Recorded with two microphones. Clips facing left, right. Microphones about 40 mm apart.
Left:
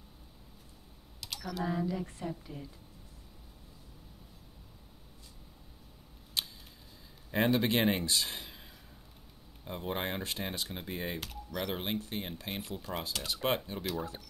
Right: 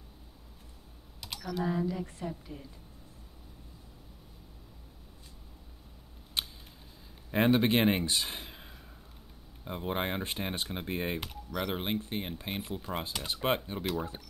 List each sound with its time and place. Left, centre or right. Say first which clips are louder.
1.4 s speech: right 2 dB; centre
6.4 s a sound: right 1 dB; right
7.2 s speech: right 3 dB; centre
11.5 s speech: right 2 dB; centre